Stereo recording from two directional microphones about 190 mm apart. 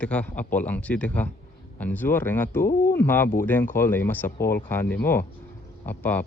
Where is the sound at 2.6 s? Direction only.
50° left (ahead or behind).